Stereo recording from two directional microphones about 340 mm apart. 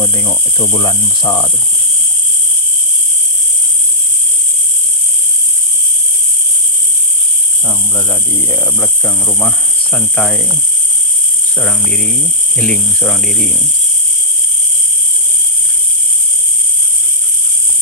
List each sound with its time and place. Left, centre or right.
0.0 s a sound: centre
7.6 s speech: centre
11.5 s speech: centre